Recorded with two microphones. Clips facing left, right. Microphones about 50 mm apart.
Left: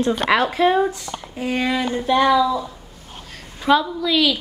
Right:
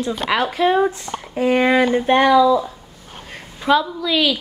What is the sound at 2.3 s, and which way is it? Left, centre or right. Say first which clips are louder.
Speech: right 5 dB; right.